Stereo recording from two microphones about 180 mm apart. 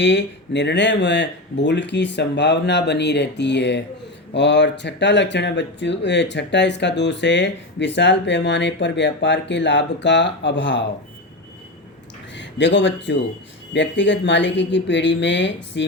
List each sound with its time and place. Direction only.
0.0 s speech: 80° left
12.4 s speech: 80° left